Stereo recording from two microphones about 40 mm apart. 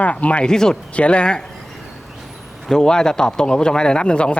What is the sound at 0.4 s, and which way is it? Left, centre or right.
Speech, centre.